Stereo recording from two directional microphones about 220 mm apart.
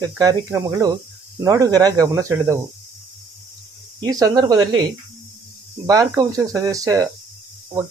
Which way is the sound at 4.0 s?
15° right (ahead or behind).